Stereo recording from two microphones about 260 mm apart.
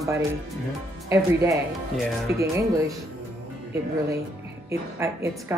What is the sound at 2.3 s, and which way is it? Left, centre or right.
Speech, left.